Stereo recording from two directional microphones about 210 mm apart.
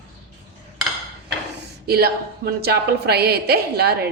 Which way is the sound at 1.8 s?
50° right (ahead or behind).